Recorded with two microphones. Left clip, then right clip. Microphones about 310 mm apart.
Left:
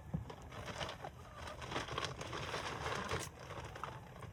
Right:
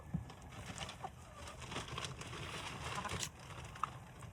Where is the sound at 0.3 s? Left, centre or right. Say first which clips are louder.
Left 4 dB; left.